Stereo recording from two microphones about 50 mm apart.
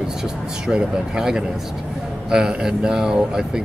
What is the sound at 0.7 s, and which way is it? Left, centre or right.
Speech, centre.